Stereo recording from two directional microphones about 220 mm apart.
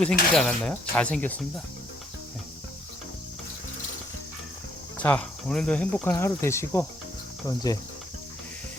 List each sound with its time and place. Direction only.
0.0 s speech: 5° left (ahead or behind)
5.0 s cricket: 5° left (ahead or behind)